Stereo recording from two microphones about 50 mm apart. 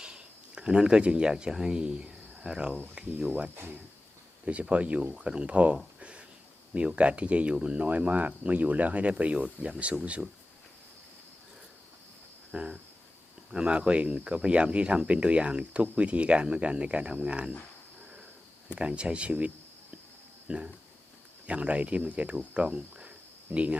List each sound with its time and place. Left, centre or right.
0.0 s speech: centre
4.7 s speech: right
6.0 s a sound: right
6.7 s speech: right
12.5 s speech: centre
18.7 s speech: right
20.5 s speech: right